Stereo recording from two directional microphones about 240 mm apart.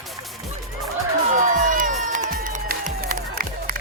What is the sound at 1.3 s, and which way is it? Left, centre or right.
Music, right.